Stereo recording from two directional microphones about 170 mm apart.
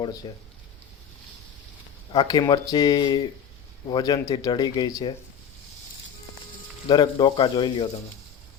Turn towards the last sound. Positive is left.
turn(degrees=25)  # may be behind; listen again after turning